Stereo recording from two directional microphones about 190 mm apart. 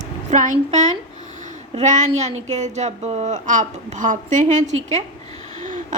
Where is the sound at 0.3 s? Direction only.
40° right (ahead or behind).